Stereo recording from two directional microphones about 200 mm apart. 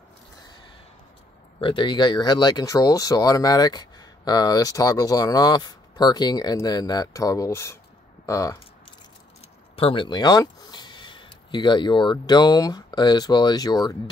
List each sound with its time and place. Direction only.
1.6 s speech: 25° left (ahead or behind)
9.8 s speech: 25° left (ahead or behind)